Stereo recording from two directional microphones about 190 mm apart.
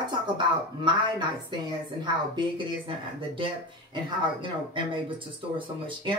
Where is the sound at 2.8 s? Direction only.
25° right (ahead or behind).